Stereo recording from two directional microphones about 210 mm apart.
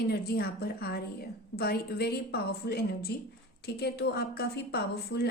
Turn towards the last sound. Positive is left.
turn(degrees=50)  # may be behind; listen again after turning